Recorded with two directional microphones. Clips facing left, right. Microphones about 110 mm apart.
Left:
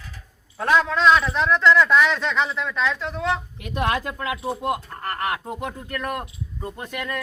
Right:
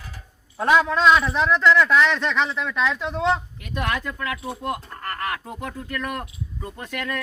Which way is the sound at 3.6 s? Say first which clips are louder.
Left 3 dB; 30° left (ahead or behind).